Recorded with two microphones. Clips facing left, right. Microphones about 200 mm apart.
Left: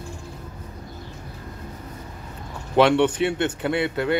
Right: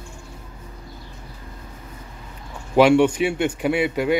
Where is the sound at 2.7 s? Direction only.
10° right (ahead or behind).